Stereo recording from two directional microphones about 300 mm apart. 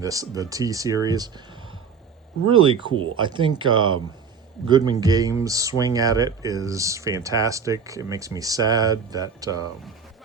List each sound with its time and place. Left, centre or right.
0.0 s speech: centre
2.6 s speech: centre